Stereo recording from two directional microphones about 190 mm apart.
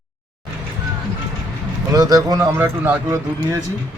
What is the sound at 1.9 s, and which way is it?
Speech, 20° right (ahead or behind).